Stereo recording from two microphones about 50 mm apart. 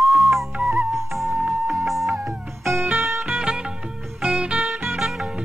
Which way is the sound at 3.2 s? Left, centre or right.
Centre.